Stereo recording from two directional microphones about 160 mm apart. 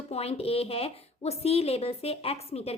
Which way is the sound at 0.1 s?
40° left (ahead or behind).